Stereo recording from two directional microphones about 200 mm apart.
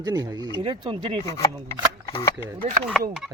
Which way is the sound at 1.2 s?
15° left (ahead or behind).